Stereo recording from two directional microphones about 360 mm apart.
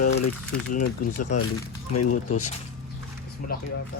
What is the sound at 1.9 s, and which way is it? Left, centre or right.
Speech, left.